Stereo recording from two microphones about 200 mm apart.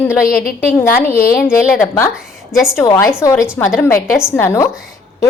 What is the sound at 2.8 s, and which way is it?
A woman's voice, 15° left (ahead or behind).